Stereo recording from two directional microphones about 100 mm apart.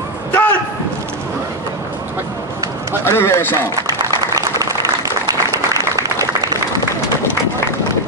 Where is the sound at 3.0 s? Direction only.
25° left (ahead or behind).